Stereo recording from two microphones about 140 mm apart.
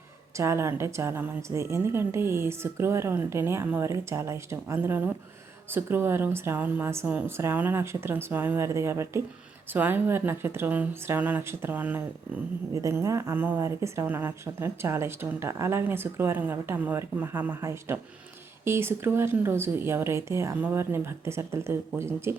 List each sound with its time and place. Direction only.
0.3 s a woman's voice: 20° right (ahead or behind)